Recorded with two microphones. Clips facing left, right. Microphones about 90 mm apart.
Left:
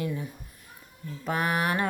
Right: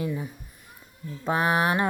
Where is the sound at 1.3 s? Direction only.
25° right (ahead or behind).